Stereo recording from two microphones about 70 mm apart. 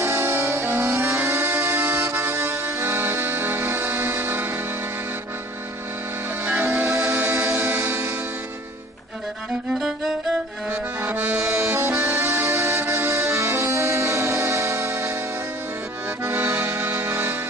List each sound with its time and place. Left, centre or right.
0.0 s music: right
6.4 s music: right
7.5 s music: right
9.5 s music: centre
11.1 s accordion: right
11.4 s music: right
16.3 s accordion: right